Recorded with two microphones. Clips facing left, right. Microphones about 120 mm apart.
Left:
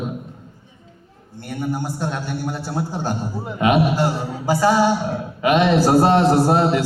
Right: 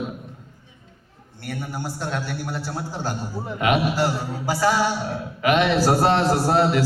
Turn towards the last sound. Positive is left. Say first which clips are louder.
# left 3 dB
turn(degrees=20)  # may be behind; listen again after turning